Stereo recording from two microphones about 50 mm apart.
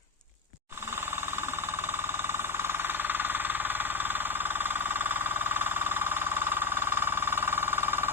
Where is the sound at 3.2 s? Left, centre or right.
Right.